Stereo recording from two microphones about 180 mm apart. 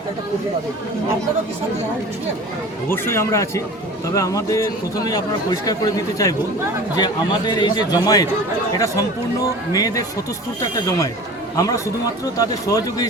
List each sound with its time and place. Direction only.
2.9 s speech: 15° left (ahead or behind)